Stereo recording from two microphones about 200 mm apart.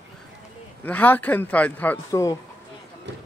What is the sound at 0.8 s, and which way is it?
Speech, 10° left (ahead or behind).